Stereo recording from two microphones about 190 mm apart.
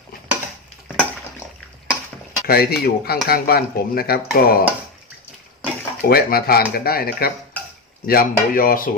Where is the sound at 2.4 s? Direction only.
55° left (ahead or behind).